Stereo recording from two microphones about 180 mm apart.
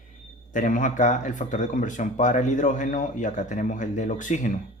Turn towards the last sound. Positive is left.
turn(degrees=45)  # may be behind; listen again after turning